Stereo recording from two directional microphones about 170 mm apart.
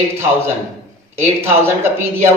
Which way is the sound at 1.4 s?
15° right (ahead or behind).